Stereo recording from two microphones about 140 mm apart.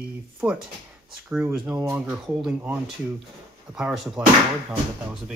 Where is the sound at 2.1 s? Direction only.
5° right (ahead or behind).